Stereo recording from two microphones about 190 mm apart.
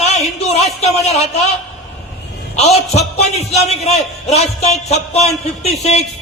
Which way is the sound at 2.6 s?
35° left (ahead or behind).